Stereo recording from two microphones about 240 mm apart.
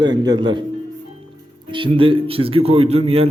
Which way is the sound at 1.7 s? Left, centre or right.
Right.